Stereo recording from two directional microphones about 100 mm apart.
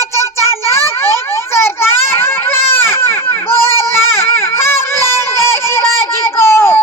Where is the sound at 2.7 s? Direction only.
25° left (ahead or behind).